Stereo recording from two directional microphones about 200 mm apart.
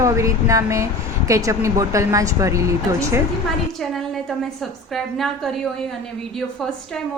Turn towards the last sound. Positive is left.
turn(degrees=0)  # may be behind; listen again after turning